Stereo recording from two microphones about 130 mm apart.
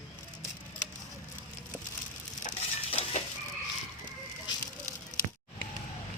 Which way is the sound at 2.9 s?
50° left (ahead or behind).